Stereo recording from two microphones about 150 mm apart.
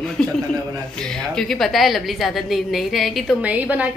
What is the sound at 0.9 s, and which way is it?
A woman's voice, 5° left (ahead or behind).